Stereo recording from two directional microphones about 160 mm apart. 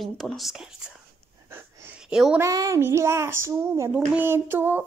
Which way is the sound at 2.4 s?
20° right (ahead or behind).